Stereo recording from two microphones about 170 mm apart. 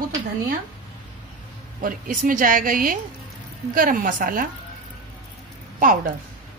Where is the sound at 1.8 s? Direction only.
55° right (ahead or behind).